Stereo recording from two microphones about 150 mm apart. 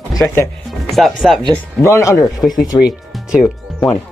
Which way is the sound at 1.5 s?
15° left (ahead or behind).